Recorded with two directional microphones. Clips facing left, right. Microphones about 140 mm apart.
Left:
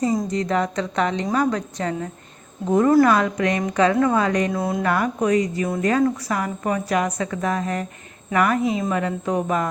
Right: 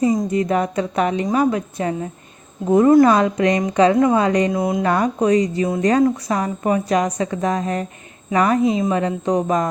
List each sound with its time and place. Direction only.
0.0 s a woman's voice: 10° right (ahead or behind)